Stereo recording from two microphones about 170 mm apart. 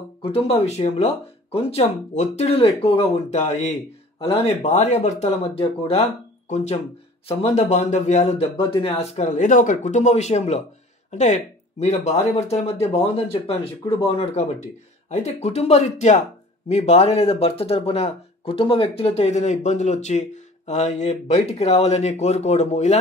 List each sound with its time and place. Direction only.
0.2 s speech: 35° left (ahead or behind)